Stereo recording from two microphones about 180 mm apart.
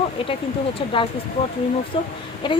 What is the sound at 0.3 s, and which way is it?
Speech, 30° left (ahead or behind).